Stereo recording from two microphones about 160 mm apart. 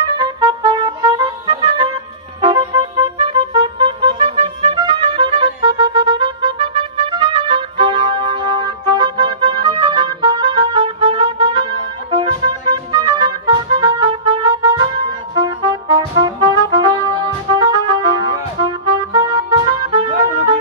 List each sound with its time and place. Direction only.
0.2 s music: 30° right (ahead or behind)